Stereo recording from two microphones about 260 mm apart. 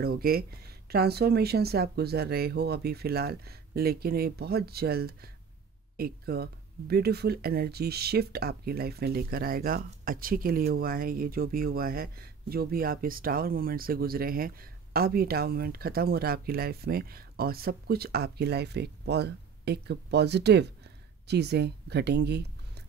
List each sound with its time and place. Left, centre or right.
0.0 s speech: right